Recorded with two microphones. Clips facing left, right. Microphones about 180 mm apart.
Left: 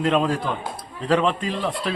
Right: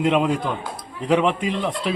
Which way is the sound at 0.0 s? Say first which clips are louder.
Right 1 dB; 15° right (ahead or behind).